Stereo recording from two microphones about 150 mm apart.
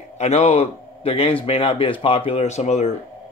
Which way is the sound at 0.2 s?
45° left (ahead or behind).